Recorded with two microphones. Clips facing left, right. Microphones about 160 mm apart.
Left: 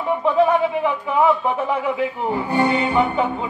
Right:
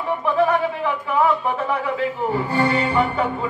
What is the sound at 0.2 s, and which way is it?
Speech, 20° left (ahead or behind).